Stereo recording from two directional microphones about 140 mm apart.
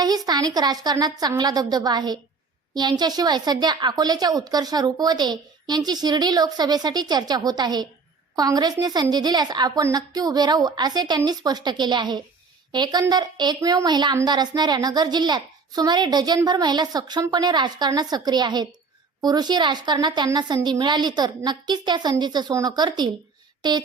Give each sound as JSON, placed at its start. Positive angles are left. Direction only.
{"t": 0.3, "sound": "a woman's voice", "side_deg": -30}